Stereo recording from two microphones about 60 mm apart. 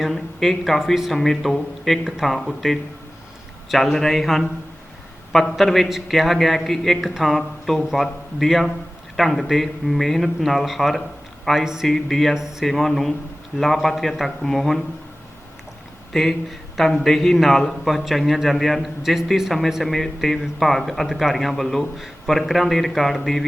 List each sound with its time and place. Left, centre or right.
0.0 s a man's voice: centre
11.9 s a man's voice: centre
12.3 s a man's voice: centre
16.1 s a man's voice: centre